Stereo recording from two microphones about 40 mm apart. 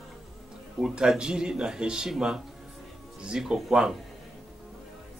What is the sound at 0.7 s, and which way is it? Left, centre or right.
A man's voice, centre.